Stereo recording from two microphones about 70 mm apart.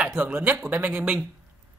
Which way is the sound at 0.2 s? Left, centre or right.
Right.